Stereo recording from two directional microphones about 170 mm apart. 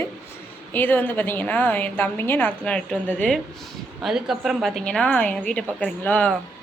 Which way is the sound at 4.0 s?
Centre (ahead or behind).